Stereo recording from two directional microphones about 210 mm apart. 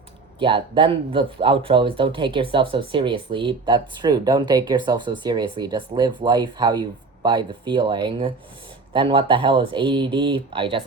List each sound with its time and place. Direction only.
0.3 s speech: 25° right (ahead or behind)